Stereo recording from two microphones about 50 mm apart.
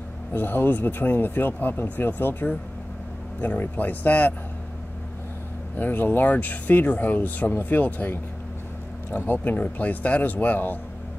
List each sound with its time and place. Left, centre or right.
0.3 s speech: left
5.8 s speech: left
9.1 s speech: left